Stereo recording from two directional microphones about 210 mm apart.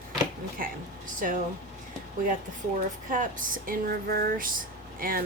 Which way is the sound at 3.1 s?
40° right (ahead or behind).